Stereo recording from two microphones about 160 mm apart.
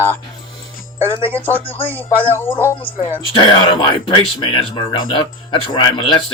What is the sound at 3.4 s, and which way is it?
Speech, 30° left (ahead or behind).